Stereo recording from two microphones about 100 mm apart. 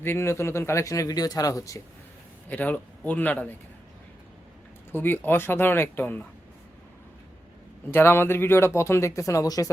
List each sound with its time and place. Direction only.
0.0 s a man's voice: 25° left (ahead or behind)
2.5 s speech: 15° left (ahead or behind)
4.9 s speech: 20° left (ahead or behind)
7.9 s speech: 25° left (ahead or behind)